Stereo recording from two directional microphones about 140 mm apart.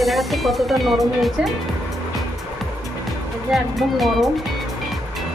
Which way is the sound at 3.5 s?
Centre (ahead or behind).